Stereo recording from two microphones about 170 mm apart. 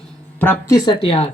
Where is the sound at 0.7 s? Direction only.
25° left (ahead or behind).